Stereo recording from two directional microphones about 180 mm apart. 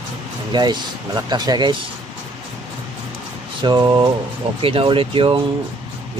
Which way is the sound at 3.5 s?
25° right (ahead or behind).